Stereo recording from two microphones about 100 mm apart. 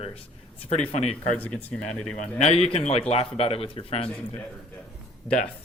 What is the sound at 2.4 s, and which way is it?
Speech, 90° left.